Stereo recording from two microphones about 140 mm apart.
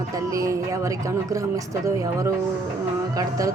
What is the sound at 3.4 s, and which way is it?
Speech, 25° right (ahead or behind).